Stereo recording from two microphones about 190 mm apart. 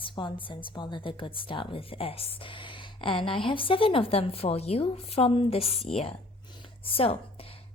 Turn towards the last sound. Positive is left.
turn(degrees=30)  # may be behind; listen again after turning